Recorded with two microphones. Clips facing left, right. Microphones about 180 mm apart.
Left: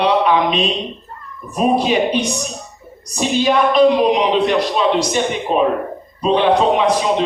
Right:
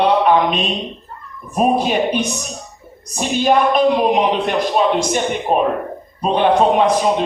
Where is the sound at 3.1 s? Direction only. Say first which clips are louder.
Even; 50° right (ahead or behind).